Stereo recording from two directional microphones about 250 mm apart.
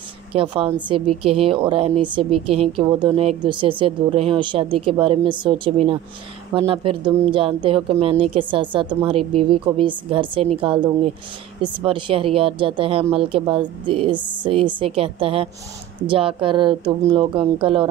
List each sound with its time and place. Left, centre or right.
0.3 s speech: right